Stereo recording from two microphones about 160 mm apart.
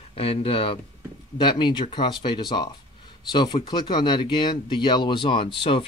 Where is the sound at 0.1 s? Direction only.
35° left (ahead or behind).